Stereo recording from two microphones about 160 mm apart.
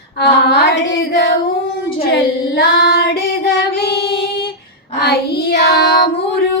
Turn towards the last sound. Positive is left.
turn(degrees=90)